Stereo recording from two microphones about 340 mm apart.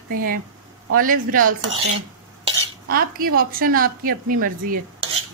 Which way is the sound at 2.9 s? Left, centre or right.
Right.